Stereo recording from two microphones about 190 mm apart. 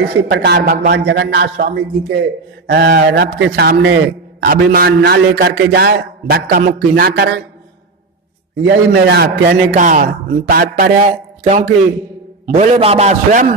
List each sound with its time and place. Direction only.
0.0 s a man's voice: 75° right (ahead or behind)
2.6 s a man's voice: 60° right (ahead or behind)
8.6 s a man's voice: 60° right (ahead or behind)
9.8 s a man's voice: 45° right (ahead or behind)